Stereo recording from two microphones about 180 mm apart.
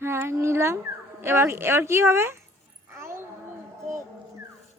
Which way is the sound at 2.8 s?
15° right (ahead or behind).